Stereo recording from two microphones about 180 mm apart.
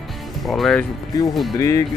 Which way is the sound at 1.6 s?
15° left (ahead or behind).